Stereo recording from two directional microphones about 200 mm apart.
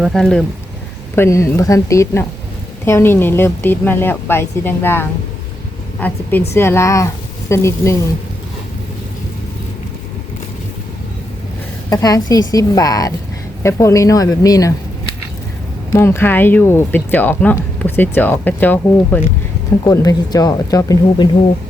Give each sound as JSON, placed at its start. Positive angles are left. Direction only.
{"t": 0.0, "sound": "speech", "side_deg": 0}
{"t": 1.1, "sound": "speech", "side_deg": 15}
{"t": 11.9, "sound": "speech", "side_deg": 15}
{"t": 15.9, "sound": "speech", "side_deg": 10}